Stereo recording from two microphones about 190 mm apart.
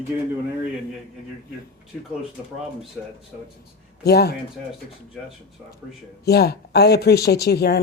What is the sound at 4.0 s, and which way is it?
Speech, 60° left (ahead or behind).